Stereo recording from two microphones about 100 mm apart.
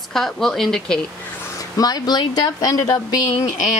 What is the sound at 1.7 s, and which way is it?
Speech, 40° left (ahead or behind).